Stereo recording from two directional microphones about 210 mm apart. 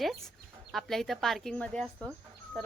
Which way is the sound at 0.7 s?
Centre (ahead or behind).